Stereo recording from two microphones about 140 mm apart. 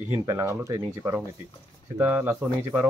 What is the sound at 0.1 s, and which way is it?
Speech, 20° right (ahead or behind).